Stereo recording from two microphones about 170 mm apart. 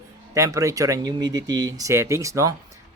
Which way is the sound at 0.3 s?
20° right (ahead or behind).